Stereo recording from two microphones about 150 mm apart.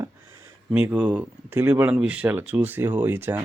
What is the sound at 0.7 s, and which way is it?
Speech, 10° right (ahead or behind).